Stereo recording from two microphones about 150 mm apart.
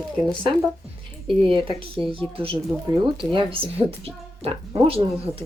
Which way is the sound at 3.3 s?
40° right (ahead or behind).